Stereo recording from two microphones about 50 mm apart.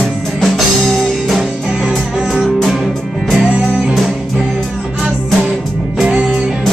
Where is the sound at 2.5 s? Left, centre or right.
Centre.